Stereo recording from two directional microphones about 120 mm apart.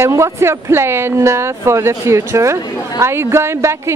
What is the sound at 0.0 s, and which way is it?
Speech, 25° right (ahead or behind).